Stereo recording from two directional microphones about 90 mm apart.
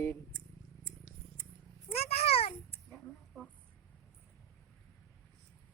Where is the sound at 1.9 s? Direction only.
90° left.